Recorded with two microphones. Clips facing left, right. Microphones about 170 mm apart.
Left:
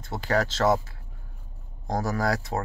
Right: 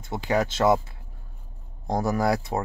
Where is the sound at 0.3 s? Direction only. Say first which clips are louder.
Right 2 dB; 10° right (ahead or behind).